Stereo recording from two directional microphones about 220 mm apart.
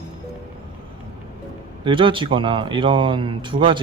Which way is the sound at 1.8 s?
20° right (ahead or behind).